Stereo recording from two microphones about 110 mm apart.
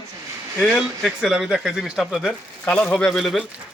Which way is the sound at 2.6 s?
15° left (ahead or behind).